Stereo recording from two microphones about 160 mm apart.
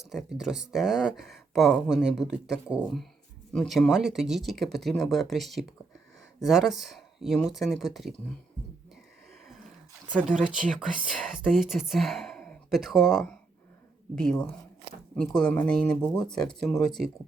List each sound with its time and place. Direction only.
0.1 s speech: centre (ahead or behind)
10.2 s speech: 5° right (ahead or behind)